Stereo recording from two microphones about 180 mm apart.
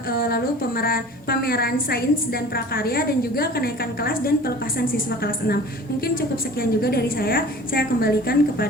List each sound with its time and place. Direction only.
0.1 s a woman's voice: 60° left (ahead or behind)
6.6 s a woman's voice: 60° left (ahead or behind)